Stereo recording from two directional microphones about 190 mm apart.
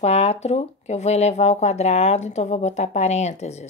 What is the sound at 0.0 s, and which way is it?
Speech, 35° left (ahead or behind).